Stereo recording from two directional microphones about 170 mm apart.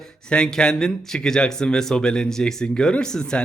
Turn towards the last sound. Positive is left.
turn(degrees=5)  # may be behind; listen again after turning